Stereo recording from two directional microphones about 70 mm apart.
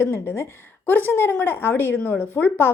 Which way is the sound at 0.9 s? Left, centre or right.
Left.